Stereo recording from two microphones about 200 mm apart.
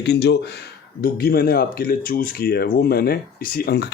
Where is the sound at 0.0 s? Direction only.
60° left (ahead or behind).